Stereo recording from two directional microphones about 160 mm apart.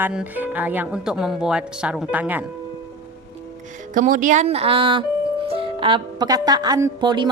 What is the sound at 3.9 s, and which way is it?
A woman's voice, 55° right (ahead or behind).